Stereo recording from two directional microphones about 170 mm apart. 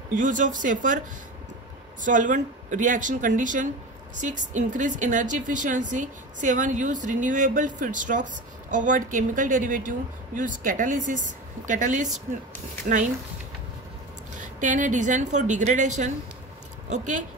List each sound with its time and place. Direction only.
0.1 s a woman's voice: 50° right (ahead or behind)
2.0 s a woman's voice: 50° right (ahead or behind)
14.3 s a woman's voice: 50° right (ahead or behind)